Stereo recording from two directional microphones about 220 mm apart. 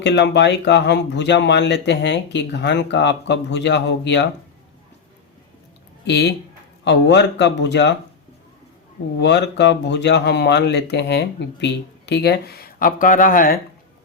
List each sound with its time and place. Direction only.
0.0 s speech: 50° left (ahead or behind)
6.1 s speech: 50° left (ahead or behind)
9.1 s speech: 50° left (ahead or behind)